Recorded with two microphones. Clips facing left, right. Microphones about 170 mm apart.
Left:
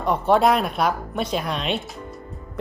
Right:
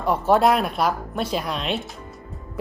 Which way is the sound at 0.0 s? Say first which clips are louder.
Even; 5° right (ahead or behind).